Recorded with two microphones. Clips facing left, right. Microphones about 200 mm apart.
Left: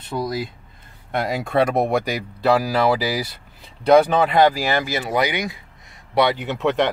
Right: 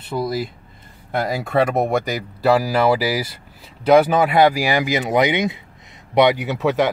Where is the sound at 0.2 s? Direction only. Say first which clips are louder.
Right 2 dB; 5° right (ahead or behind).